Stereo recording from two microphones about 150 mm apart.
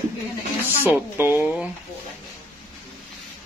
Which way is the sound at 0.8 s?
15° right (ahead or behind).